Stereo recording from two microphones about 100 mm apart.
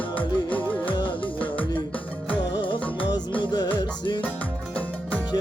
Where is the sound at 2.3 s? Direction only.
50° left (ahead or behind).